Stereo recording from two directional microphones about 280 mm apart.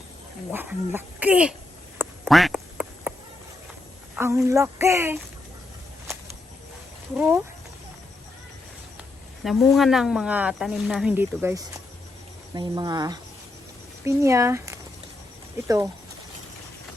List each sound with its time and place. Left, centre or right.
0.5 s speech: centre
2.0 s quack: centre
4.1 s a woman's voice: centre
7.2 s speech: centre
9.4 s a woman's voice: centre